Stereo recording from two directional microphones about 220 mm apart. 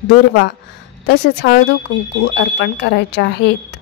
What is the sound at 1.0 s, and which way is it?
A woman's voice, 50° left (ahead or behind).